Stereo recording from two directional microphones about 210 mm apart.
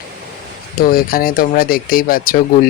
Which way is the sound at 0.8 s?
45° left (ahead or behind).